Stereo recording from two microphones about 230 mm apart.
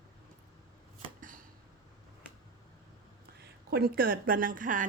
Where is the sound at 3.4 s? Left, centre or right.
Right.